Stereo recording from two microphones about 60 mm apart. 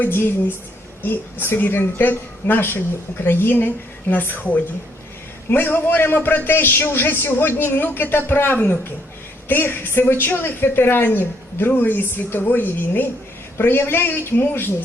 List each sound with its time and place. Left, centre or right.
0.1 s a woman's voice: left
5.5 s a woman's voice: left